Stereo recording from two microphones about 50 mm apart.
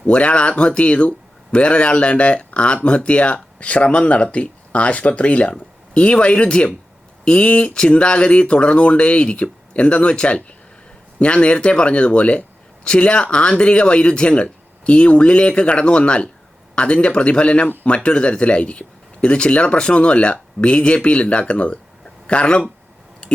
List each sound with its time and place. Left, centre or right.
0.0 s a man's voice: left